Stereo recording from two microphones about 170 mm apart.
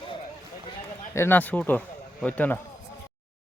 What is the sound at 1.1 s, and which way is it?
A man's voice, 10° left (ahead or behind).